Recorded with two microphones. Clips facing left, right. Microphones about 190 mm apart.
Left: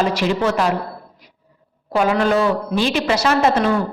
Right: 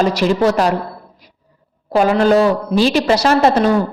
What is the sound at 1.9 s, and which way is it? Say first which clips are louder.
Speech: right 4 dB; 35° right (ahead or behind).